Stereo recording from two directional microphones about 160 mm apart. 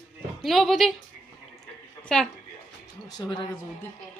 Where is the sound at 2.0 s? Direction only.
5° left (ahead or behind).